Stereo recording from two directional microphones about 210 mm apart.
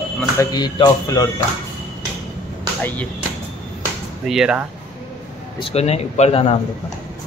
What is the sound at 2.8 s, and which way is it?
Speech, 5° left (ahead or behind).